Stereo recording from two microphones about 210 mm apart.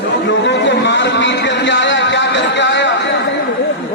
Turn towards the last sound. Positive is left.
turn(degrees=60)  # may be behind; listen again after turning